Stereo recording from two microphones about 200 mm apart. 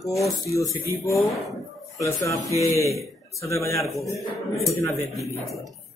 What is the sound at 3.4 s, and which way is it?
Speech, 15° left (ahead or behind).